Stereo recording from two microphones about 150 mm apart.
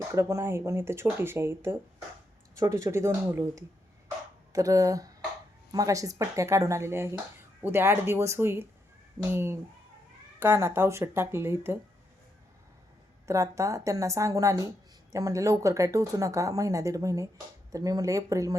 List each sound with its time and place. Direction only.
0.1 s speech: 20° right (ahead or behind)
13.2 s speech: 20° right (ahead or behind)